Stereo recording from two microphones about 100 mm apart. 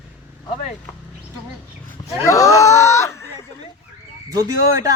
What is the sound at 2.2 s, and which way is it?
Speech, 35° left (ahead or behind).